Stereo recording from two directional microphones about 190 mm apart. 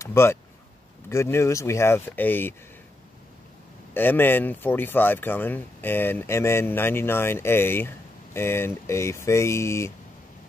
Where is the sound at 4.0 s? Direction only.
10° left (ahead or behind).